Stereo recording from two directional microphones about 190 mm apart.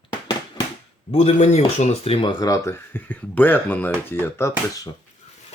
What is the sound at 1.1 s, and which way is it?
Speech, 30° left (ahead or behind).